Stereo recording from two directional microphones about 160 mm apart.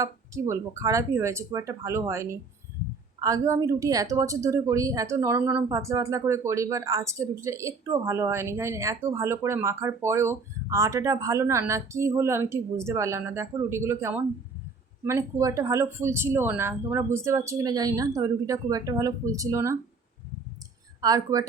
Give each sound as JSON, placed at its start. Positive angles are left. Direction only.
{"t": 0.0, "sound": "a woman's voice", "side_deg": -20}
{"t": 21.0, "sound": "a woman's voice", "side_deg": -20}